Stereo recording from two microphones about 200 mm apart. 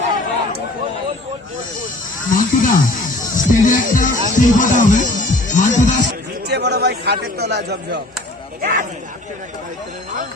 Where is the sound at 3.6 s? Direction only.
40° left (ahead or behind).